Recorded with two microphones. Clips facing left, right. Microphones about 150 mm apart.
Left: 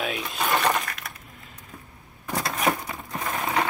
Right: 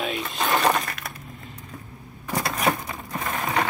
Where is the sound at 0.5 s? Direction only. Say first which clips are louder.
Right 2 dB; 20° right (ahead or behind).